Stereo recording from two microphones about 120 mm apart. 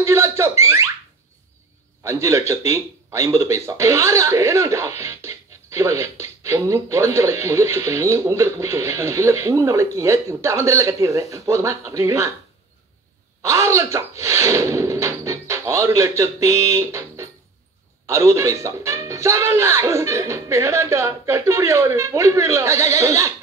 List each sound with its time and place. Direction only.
0.0 s speech: 25° right (ahead or behind)
2.0 s speech: 25° right (ahead or behind)
13.4 s speech: 25° right (ahead or behind)